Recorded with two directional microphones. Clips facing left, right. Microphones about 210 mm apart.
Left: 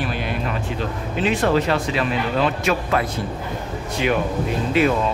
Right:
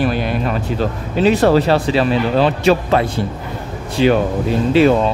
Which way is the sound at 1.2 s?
35° right (ahead or behind).